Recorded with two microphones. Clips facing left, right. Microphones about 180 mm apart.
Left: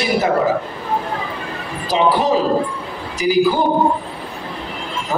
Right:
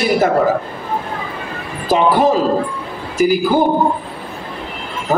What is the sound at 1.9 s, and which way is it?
A man's voice, 50° right (ahead or behind).